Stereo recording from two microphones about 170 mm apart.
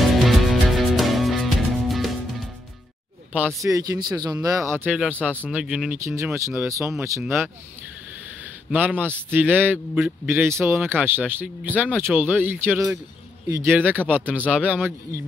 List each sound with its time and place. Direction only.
0.1 s music: centre (ahead or behind)
3.6 s speech: 20° right (ahead or behind); by 5.9 s 5° right (ahead or behind)
6.0 s a man's voice: 15° right (ahead or behind)
8.5 s a man's voice: 10° right (ahead or behind)